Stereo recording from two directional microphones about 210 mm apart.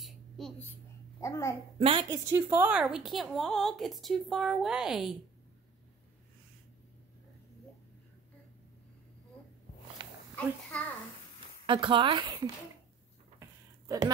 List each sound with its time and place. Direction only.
0.0 s a sound: centre (ahead or behind)
1.2 s a child's voice: 15° left (ahead or behind)
1.8 s speech: 25° right (ahead or behind)
2.0 s a woman's voice: 15° right (ahead or behind)
10.4 s a child's voice: 5° left (ahead or behind)
11.6 s speech: 25° right (ahead or behind)
13.4 s a sound: 15° right (ahead or behind)